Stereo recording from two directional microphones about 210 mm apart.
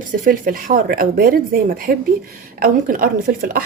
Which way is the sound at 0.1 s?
40° right (ahead or behind).